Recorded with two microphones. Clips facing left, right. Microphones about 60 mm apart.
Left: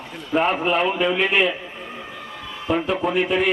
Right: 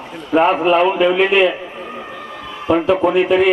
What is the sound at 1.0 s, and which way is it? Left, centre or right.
Speech, right.